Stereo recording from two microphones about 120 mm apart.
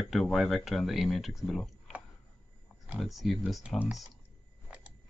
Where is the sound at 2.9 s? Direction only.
Centre (ahead or behind).